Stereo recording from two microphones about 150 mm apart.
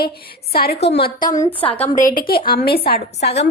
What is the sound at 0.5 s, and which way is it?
A woman's voice, 90° left.